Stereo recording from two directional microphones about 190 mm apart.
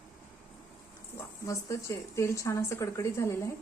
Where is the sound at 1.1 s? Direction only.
15° left (ahead or behind).